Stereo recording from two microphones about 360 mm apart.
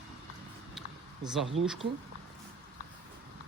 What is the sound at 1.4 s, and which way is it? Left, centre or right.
Speech, right.